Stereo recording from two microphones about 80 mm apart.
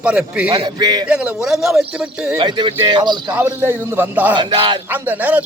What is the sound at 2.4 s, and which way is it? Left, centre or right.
Speech, right.